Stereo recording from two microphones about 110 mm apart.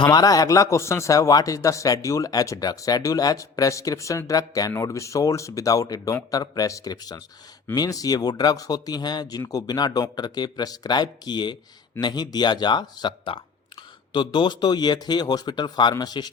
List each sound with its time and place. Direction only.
0.0 s speech: 35° left (ahead or behind)